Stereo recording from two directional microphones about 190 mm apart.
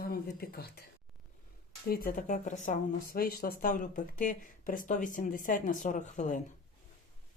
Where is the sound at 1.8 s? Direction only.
50° left (ahead or behind).